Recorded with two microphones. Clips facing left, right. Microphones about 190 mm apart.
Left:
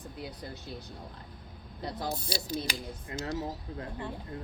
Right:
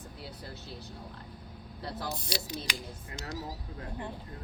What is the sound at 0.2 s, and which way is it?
Speech, 15° left (ahead or behind).